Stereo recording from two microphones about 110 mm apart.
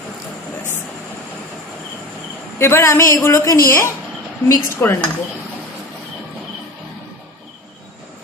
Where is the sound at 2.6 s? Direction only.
25° left (ahead or behind).